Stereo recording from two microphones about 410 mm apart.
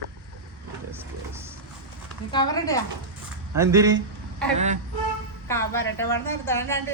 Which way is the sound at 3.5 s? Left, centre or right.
Centre.